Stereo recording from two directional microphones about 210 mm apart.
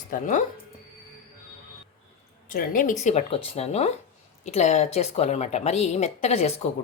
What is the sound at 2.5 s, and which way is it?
Speech, 40° left (ahead or behind).